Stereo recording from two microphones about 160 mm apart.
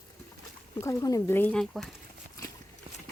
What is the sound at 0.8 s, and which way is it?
Speech, 20° left (ahead or behind).